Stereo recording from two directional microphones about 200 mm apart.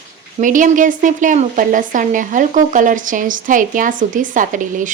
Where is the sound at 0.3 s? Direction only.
40° right (ahead or behind).